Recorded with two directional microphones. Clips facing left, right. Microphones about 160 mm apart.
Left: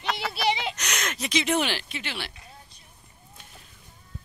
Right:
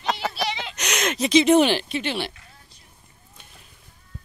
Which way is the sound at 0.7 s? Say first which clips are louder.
Right 7 dB; 20° right (ahead or behind).